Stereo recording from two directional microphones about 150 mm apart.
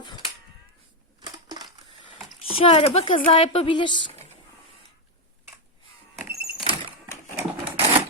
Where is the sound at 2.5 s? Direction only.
40° left (ahead or behind).